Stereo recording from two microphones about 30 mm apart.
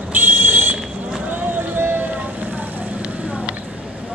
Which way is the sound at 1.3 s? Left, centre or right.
Right.